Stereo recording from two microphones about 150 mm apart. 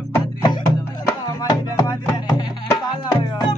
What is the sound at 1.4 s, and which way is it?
Music, 25° left (ahead or behind).